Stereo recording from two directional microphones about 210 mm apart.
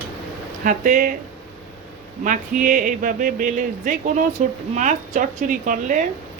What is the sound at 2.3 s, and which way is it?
Speech, 40° right (ahead or behind).